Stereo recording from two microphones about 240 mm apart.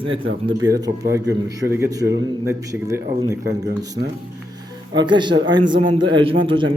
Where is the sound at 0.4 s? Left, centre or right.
Centre.